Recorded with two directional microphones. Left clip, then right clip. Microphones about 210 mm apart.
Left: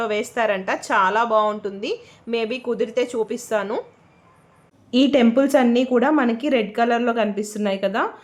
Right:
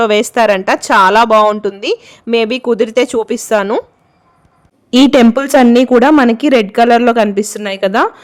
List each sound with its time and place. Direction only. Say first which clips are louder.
0.0 s a woman's voice: right 12 dB; 55° right (ahead or behind)
4.9 s a woman's voice: right 9 dB; 55° right (ahead or behind)